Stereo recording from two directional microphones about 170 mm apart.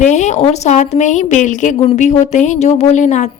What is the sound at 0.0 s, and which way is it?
A woman's voice, 45° left (ahead or behind).